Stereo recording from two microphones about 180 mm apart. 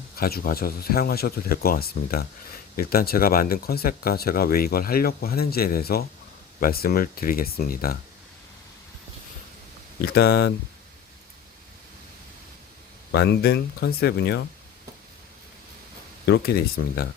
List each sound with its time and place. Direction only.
0.2 s speech: 55° left (ahead or behind)
10.0 s speech: 65° left (ahead or behind)
13.1 s speech: 70° left (ahead or behind)
16.2 s speech: 60° left (ahead or behind)